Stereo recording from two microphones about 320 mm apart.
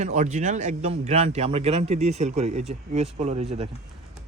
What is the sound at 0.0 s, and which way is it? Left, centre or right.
Speech, right.